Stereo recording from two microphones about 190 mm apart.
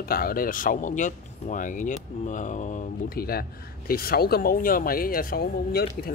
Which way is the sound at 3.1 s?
55° left (ahead or behind).